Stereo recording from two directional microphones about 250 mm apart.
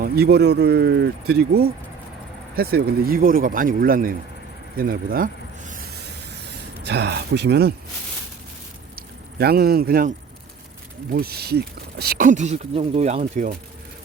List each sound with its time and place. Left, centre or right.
0.0 s speech: right
9.0 s speech: right